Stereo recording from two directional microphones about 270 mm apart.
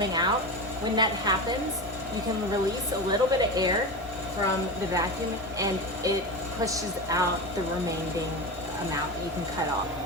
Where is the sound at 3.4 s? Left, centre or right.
Centre.